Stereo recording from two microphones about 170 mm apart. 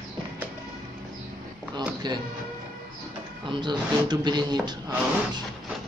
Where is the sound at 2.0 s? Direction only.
25° right (ahead or behind).